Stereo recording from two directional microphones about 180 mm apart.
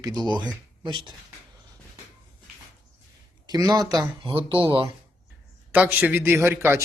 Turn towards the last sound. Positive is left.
turn(degrees=-15)  # may be behind; listen again after turning